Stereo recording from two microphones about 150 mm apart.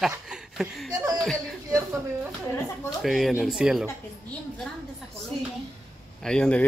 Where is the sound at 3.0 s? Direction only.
Centre (ahead or behind).